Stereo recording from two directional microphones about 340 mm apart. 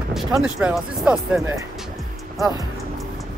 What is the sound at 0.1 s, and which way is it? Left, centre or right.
Speech, centre.